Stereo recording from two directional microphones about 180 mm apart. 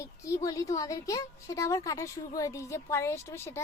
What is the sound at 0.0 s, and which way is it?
A woman's voice, 15° left (ahead or behind).